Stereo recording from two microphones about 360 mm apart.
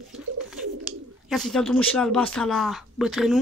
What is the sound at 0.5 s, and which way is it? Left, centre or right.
Speech, centre.